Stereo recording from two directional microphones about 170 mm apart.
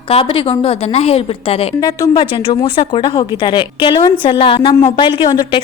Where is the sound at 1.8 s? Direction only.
20° left (ahead or behind).